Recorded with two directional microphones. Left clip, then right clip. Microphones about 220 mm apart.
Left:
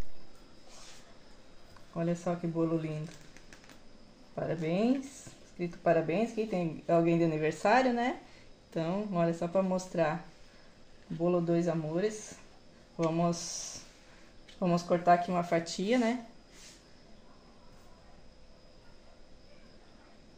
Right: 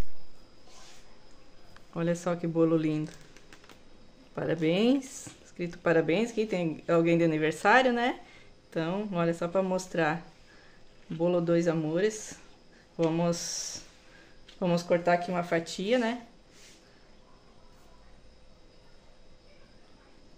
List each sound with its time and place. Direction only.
2.0 s speech: 30° right (ahead or behind)
4.4 s speech: 30° right (ahead or behind)
11.2 s speech: 25° right (ahead or behind)
13.1 s speech: 20° right (ahead or behind)